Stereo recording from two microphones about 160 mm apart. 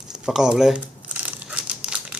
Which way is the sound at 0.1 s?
5° right (ahead or behind).